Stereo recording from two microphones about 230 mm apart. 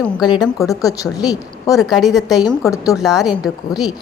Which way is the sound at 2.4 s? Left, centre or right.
Centre.